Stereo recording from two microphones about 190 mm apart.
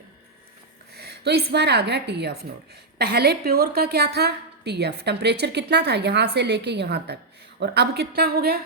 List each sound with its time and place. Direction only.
0.9 s a woman's voice: 60° right (ahead or behind)